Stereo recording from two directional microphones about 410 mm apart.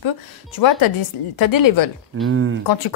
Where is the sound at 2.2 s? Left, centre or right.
Right.